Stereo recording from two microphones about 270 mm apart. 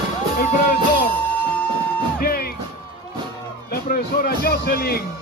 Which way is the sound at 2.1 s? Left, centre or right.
Left.